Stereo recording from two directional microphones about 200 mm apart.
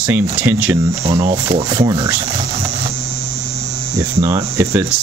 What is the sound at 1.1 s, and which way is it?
Speech, 35° right (ahead or behind).